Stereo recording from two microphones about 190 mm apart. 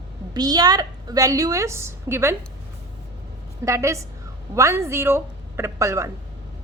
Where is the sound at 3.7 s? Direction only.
15° right (ahead or behind).